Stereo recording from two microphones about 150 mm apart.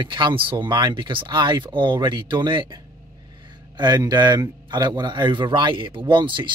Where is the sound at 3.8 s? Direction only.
25° right (ahead or behind).